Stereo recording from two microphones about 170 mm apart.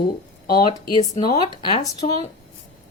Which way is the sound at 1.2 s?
25° left (ahead or behind).